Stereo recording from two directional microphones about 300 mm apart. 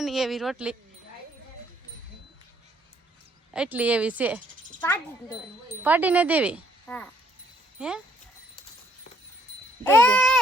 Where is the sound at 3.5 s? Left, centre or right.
Centre.